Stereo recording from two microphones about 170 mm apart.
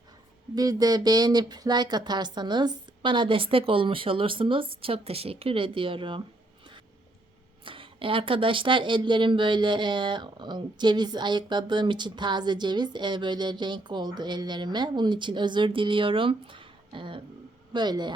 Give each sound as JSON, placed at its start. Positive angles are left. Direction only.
{"t": 0.5, "sound": "speech", "side_deg": -20}
{"t": 7.6, "sound": "speech", "side_deg": -30}